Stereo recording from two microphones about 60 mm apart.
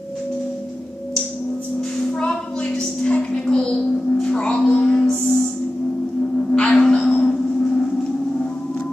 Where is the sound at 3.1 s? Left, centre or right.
Left.